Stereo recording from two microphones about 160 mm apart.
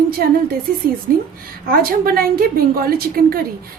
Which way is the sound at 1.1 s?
60° right (ahead or behind).